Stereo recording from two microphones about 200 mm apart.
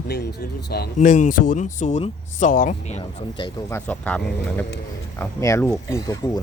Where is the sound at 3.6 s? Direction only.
10° left (ahead or behind).